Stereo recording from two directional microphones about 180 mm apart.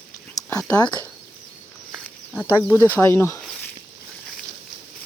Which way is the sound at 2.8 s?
15° left (ahead or behind).